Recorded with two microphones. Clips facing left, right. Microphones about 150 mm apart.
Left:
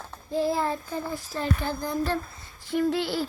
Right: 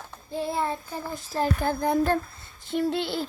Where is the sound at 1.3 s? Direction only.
45° right (ahead or behind).